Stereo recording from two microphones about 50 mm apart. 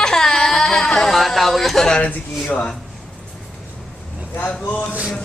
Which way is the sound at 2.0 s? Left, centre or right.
Left.